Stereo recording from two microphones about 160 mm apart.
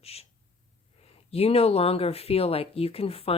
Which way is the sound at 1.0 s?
40° left (ahead or behind).